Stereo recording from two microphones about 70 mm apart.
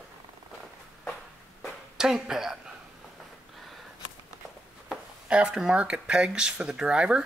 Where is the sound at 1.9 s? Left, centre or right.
Centre.